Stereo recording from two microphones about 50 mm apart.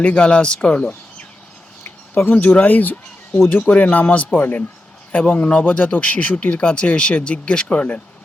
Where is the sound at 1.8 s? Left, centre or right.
Left.